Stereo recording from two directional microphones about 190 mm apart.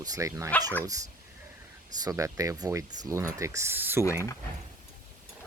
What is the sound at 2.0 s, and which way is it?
Speech, 15° right (ahead or behind).